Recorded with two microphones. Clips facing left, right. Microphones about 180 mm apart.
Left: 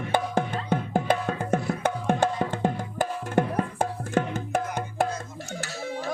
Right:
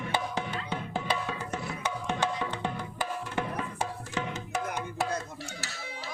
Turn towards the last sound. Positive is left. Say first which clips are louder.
# left 10 dB
turn(degrees=50)  # may be behind; listen again after turning